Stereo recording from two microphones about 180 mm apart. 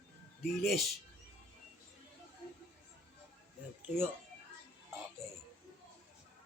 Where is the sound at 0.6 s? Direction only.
Centre (ahead or behind).